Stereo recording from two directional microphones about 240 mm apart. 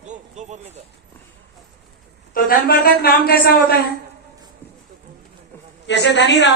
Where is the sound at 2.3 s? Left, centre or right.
Left.